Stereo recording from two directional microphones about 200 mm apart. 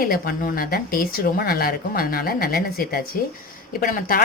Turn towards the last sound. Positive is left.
turn(degrees=45)  # may be behind; listen again after turning